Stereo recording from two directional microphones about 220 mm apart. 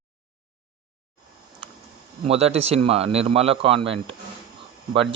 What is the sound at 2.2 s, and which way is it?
Speech, 30° right (ahead or behind).